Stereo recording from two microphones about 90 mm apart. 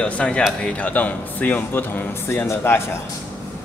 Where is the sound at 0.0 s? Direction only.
10° left (ahead or behind).